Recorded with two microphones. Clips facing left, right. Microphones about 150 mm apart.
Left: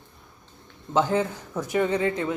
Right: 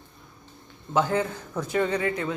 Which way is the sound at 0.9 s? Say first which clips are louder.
Left 1 dB; 20° left (ahead or behind).